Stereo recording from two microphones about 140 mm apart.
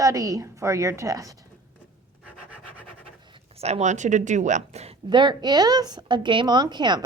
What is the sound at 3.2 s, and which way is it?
Speech, 40° right (ahead or behind).